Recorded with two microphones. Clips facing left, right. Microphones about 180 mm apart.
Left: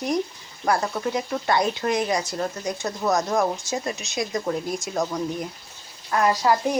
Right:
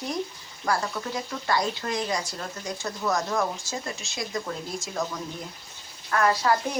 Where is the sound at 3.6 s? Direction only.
20° left (ahead or behind).